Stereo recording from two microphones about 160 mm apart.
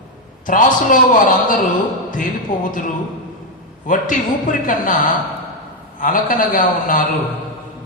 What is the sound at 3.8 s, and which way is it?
A man's voice, 55° left (ahead or behind).